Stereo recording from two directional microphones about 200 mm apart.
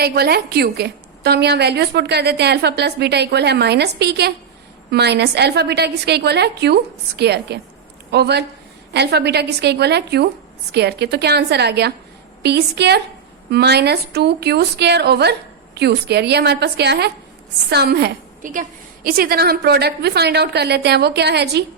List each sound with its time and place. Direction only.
0.0 s a woman's voice: 50° right (ahead or behind)